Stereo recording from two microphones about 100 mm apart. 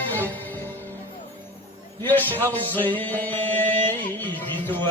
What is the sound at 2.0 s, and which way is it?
Chant, 20° left (ahead or behind).